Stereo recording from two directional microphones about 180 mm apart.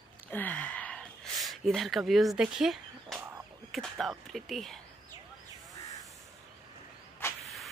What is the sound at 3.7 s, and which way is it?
Speech, centre (ahead or behind).